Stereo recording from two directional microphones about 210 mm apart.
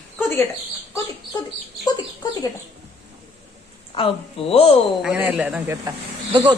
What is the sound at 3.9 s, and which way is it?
Speech, 25° left (ahead or behind).